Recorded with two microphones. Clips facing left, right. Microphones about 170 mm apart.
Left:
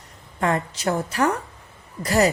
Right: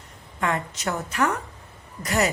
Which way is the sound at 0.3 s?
35° left (ahead or behind).